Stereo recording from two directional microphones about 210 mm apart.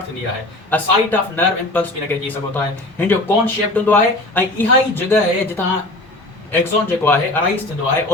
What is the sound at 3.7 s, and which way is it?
Speech, 10° left (ahead or behind).